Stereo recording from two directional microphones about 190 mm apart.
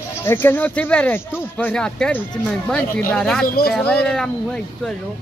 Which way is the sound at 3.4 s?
55° left (ahead or behind).